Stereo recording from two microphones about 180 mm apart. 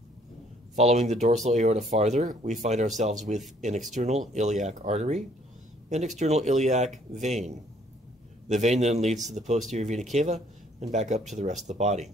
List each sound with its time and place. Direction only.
0.7 s speech: 40° right (ahead or behind)